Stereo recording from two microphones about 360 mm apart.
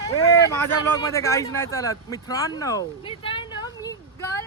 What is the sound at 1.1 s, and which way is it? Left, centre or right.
Speech, centre.